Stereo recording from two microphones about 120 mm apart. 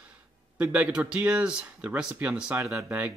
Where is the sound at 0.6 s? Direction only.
10° right (ahead or behind).